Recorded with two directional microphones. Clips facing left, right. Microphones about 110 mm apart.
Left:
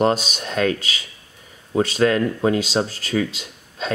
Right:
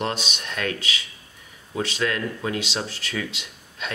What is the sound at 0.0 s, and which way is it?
Speech, 40° left (ahead or behind).